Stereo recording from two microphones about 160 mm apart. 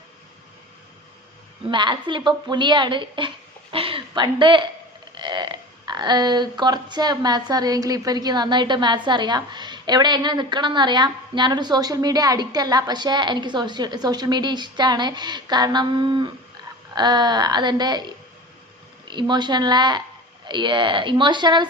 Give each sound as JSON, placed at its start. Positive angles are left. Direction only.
{"t": 1.7, "sound": "a woman's voice", "side_deg": -30}